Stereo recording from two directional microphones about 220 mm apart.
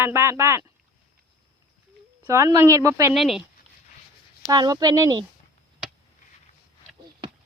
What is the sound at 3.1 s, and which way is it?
Speech, centre (ahead or behind).